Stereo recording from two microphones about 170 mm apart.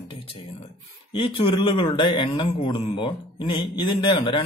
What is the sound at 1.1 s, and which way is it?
Speech, 30° left (ahead or behind).